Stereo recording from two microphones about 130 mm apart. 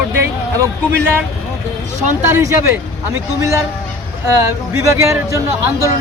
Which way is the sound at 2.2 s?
20° right (ahead or behind).